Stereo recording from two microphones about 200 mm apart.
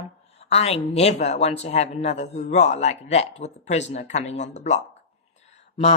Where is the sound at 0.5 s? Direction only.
30° left (ahead or behind).